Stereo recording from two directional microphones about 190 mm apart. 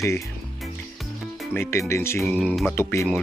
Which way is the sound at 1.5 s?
15° left (ahead or behind).